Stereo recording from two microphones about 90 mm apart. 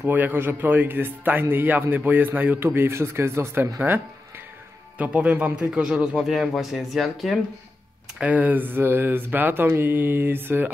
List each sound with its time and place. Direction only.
0.0 s speech: 20° right (ahead or behind)
4.9 s a man's voice: 15° right (ahead or behind); by 7.3 s centre (ahead or behind)
8.2 s speech: 15° right (ahead or behind)